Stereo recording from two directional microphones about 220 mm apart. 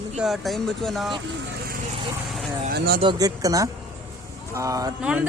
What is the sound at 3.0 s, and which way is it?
Speech, 20° right (ahead or behind).